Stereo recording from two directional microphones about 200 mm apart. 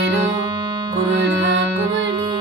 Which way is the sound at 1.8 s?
20° right (ahead or behind).